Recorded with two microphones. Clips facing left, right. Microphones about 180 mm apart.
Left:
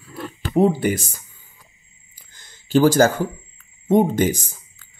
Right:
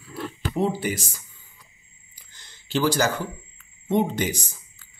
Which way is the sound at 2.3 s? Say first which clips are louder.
Left 9 dB; 50° left (ahead or behind).